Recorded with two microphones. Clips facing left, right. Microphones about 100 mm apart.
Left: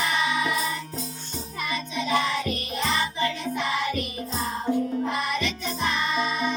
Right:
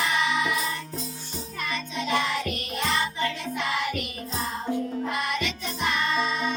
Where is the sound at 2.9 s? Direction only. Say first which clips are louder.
Left 1 dB; 15° left (ahead or behind).